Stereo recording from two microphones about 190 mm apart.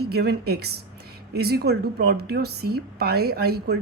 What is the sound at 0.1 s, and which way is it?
A woman's voice, 55° right (ahead or behind).